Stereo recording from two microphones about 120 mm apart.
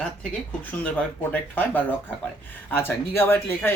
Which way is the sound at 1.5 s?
15° left (ahead or behind).